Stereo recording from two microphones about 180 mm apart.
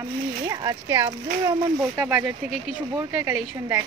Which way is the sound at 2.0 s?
10° right (ahead or behind).